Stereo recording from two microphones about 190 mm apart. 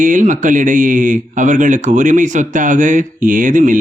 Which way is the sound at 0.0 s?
40° right (ahead or behind).